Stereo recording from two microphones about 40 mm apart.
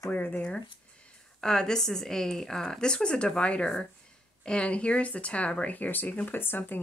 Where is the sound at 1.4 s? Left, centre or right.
Centre; by 5.5 s left.